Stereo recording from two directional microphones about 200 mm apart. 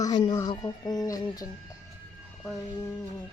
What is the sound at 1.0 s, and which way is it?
Music, 15° left (ahead or behind).